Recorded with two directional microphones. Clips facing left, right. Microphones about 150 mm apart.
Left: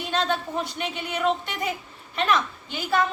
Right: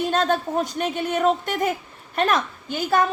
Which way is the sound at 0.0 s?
45° right (ahead or behind).